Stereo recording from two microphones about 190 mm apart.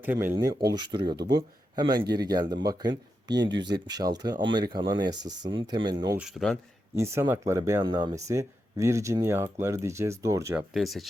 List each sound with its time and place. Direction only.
0.0 s speech: 10° right (ahead or behind)
6.1 s speech: centre (ahead or behind)
6.9 s speech: 15° right (ahead or behind)
10.8 s speech: centre (ahead or behind)